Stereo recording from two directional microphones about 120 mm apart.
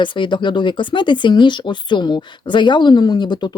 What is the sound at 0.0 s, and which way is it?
Speech, 40° left (ahead or behind).